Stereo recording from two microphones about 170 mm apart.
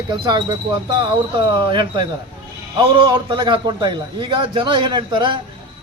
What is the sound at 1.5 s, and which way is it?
A man's voice, 25° right (ahead or behind).